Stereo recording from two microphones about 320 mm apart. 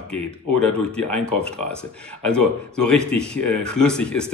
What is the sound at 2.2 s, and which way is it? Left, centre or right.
Speech, centre.